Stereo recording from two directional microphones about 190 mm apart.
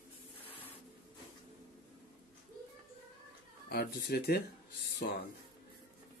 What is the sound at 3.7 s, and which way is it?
Speech, 60° left (ahead or behind).